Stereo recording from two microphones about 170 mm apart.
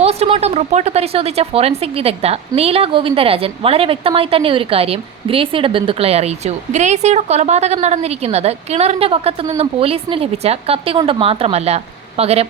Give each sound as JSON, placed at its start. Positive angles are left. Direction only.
{"t": 0.0, "sound": "a woman's voice", "side_deg": -35}